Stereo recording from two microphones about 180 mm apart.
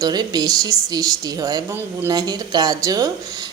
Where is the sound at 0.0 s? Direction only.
20° right (ahead or behind).